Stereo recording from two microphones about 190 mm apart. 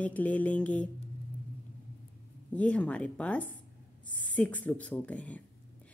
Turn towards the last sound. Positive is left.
turn(degrees=5)  # may be behind; listen again after turning